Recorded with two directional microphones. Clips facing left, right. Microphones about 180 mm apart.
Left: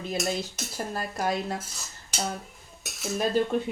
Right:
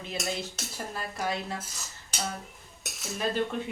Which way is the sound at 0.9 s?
45° left (ahead or behind).